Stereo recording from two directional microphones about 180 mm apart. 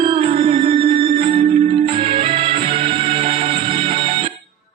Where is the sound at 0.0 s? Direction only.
30° right (ahead or behind).